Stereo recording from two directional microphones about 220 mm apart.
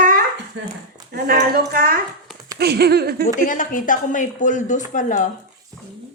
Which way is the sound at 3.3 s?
35° left (ahead or behind).